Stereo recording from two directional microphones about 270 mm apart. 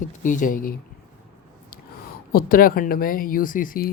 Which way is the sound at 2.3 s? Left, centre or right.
Left.